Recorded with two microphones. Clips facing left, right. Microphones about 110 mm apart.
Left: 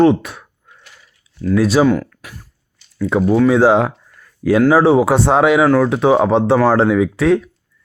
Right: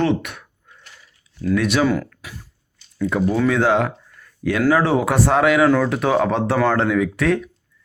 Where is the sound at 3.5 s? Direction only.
30° left (ahead or behind).